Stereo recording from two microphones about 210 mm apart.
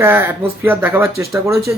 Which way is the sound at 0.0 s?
10° right (ahead or behind).